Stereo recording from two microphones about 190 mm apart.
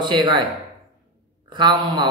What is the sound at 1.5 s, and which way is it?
Speech, 25° right (ahead or behind).